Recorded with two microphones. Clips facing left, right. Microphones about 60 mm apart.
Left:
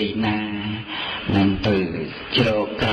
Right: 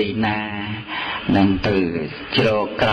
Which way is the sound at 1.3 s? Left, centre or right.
Right.